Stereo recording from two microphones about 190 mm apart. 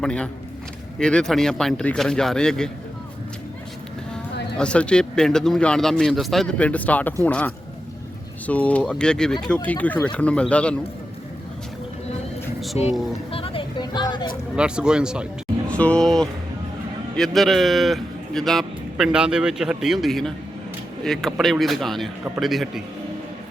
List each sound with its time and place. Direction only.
0.0 s a man's voice: 5° left (ahead or behind)
4.5 s a man's voice: 5° left (ahead or behind)
13.3 s music: 30° left (ahead or behind)
14.5 s a man's voice: 5° right (ahead or behind)
15.7 s a man's voice: 5° left (ahead or behind)